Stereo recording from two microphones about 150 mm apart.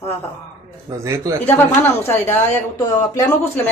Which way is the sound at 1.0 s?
20° right (ahead or behind).